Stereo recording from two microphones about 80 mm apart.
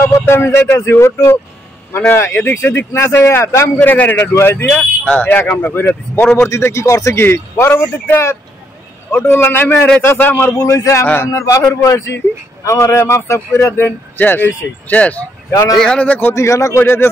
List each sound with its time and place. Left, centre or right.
0.0 s speech: left
3.8 s speech: left
4.3 s speech: left
4.6 s speech: centre
10.6 s speech: left; by 16.2 s centre
16.3 s speech: left